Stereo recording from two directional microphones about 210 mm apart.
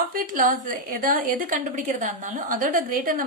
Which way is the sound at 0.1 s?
40° right (ahead or behind).